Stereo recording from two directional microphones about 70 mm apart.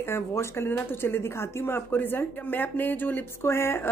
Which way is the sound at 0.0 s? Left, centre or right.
Left.